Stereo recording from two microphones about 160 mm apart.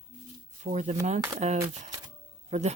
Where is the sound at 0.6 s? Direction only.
45° right (ahead or behind).